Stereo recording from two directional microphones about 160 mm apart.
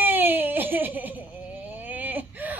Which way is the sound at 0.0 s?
10° right (ahead or behind).